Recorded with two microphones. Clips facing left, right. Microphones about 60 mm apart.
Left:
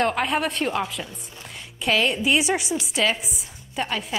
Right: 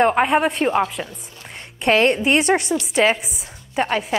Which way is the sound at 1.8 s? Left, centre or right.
Right.